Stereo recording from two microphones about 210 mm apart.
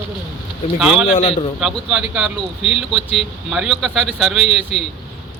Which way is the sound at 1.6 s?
Centre (ahead or behind).